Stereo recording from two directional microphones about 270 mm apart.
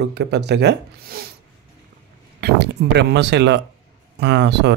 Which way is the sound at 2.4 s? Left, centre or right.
Right.